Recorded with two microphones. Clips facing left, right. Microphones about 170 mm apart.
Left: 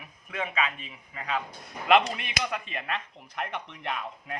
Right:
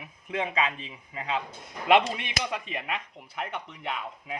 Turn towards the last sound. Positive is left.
turn(degrees=-5)  # may be behind; listen again after turning